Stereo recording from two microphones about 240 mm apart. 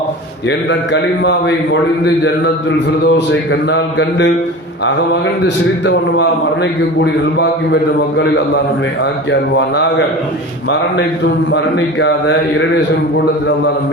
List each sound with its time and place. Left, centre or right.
1.2 s a man's voice: left
5.8 s a man's voice: left
11.5 s a man's voice: left